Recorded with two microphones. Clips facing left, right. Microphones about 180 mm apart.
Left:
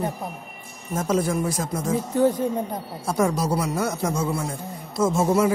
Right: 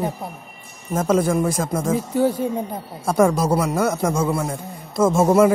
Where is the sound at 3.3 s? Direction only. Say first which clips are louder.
Right 4 dB; 55° right (ahead or behind).